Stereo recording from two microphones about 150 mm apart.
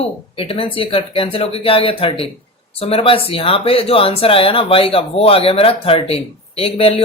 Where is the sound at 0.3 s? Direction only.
40° left (ahead or behind).